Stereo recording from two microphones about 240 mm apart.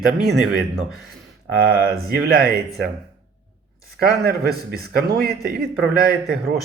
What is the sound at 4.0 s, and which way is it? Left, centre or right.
A man's voice, right.